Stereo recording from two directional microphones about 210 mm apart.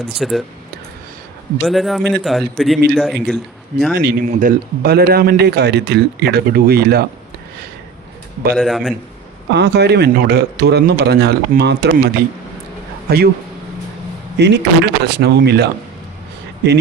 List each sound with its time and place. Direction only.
0.2 s a man's voice: centre (ahead or behind)
1.6 s a man's voice: centre (ahead or behind)
3.9 s speech: 40° right (ahead or behind)
8.5 s a man's voice: centre (ahead or behind)
9.6 s speech: 55° right (ahead or behind)
14.3 s speech: 55° right (ahead or behind)